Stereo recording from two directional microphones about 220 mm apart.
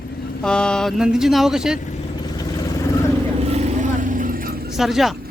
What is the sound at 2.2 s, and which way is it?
Vehicle, 20° left (ahead or behind).